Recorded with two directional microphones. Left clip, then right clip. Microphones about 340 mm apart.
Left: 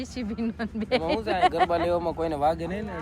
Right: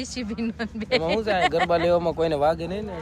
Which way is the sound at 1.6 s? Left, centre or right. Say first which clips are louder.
Right 4 dB; right.